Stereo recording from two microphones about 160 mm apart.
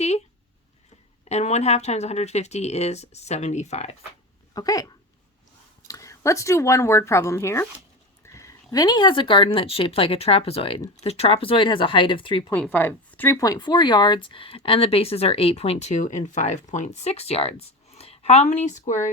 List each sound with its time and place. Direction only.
1.3 s speech: 45° left (ahead or behind)
4.5 s speech: 20° left (ahead or behind)
5.9 s speech: 20° left (ahead or behind)
12.5 s a woman's voice: 10° left (ahead or behind); by 19.1 s 50° left (ahead or behind)